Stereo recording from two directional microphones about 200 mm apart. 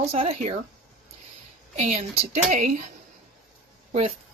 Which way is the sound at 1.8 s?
35° right (ahead or behind).